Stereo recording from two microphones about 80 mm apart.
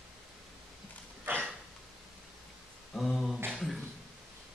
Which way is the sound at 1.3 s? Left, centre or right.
Right.